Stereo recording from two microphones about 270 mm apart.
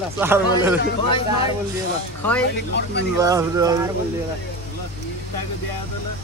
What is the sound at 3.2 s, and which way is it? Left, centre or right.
Speech, centre.